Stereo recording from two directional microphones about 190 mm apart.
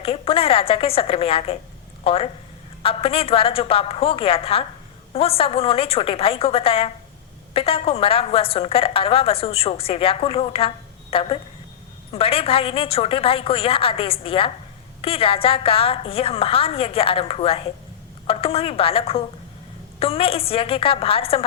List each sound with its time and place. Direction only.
0.0 s a woman's voice: 30° left (ahead or behind)